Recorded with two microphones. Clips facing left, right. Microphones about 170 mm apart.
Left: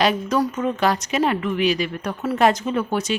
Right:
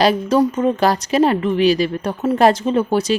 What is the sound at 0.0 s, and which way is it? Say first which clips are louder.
A woman's voice: right 5 dB; 35° right (ahead or behind).